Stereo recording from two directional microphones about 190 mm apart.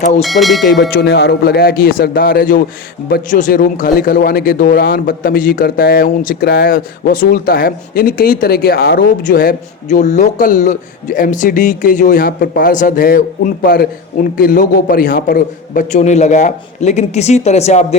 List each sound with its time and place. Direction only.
0.2 s speech: centre (ahead or behind)
0.8 s a man's voice: 60° left (ahead or behind); by 17.8 s 35° left (ahead or behind)